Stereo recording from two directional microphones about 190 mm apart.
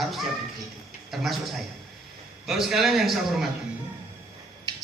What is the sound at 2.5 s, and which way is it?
A man's voice, centre (ahead or behind).